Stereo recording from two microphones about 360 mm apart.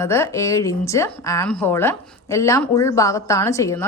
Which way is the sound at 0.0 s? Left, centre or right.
Centre.